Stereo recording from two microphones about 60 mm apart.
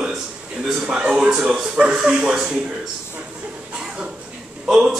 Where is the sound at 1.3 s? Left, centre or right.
Centre.